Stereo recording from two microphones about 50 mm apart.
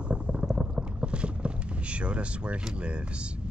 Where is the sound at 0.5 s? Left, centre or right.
Right.